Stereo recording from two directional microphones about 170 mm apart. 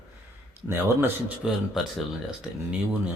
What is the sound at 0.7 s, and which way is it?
Speech, 10° right (ahead or behind).